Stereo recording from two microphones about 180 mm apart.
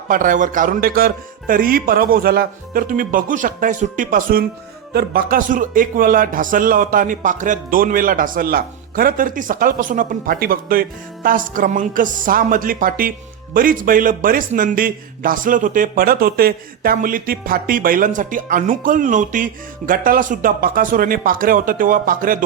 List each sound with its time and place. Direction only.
0.1 s a man's voice: 50° right (ahead or behind)